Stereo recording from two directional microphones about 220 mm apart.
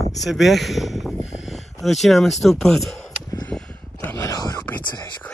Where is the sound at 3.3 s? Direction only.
10° left (ahead or behind).